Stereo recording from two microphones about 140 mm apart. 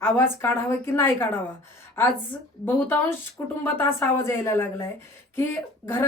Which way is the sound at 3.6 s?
15° left (ahead or behind).